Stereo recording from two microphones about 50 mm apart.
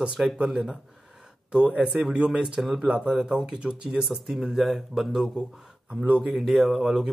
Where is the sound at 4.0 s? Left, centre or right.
Centre.